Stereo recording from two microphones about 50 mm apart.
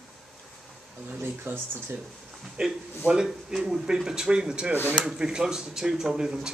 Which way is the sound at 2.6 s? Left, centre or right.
Centre.